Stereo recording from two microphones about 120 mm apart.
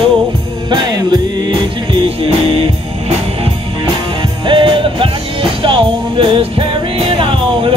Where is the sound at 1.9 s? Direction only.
50° right (ahead or behind).